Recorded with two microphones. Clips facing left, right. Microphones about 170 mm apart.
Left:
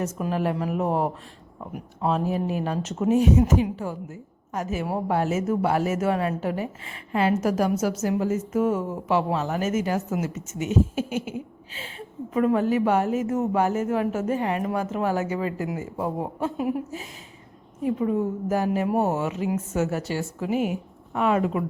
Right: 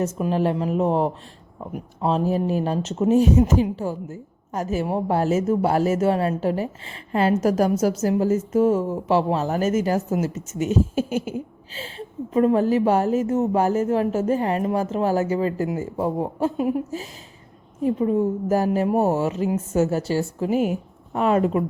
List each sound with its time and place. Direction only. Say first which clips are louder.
0.0 s a woman's voice: right 4 dB; 30° right (ahead or behind)